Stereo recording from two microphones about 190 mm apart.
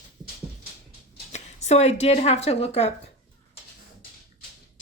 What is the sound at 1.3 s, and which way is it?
A woman's voice, 35° left (ahead or behind).